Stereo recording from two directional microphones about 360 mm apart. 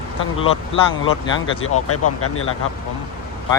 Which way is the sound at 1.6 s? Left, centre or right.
Left.